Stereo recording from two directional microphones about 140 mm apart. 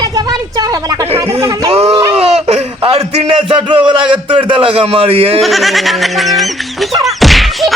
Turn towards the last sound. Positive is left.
turn(degrees=0)  # may be behind; listen again after turning